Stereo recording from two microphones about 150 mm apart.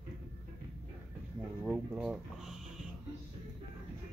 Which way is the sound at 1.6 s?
5° right (ahead or behind).